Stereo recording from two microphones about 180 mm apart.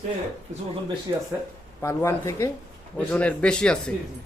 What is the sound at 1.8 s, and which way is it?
A man's voice, 15° left (ahead or behind).